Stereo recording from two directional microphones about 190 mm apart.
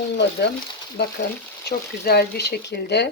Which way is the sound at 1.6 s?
55° left (ahead or behind).